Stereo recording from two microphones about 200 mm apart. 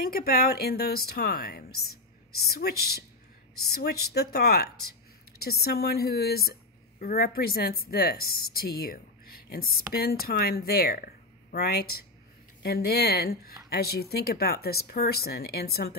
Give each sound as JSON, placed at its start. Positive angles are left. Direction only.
{"t": 0.0, "sound": "a woman's voice", "side_deg": 50}